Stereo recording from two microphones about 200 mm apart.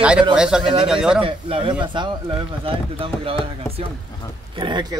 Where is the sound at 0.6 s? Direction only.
25° right (ahead or behind).